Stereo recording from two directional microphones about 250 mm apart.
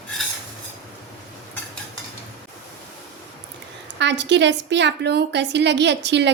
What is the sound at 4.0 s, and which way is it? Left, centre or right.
A woman's voice, right.